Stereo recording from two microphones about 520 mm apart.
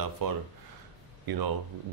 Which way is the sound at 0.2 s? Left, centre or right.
Right.